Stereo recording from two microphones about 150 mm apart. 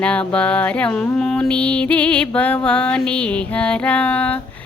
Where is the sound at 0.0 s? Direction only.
10° left (ahead or behind).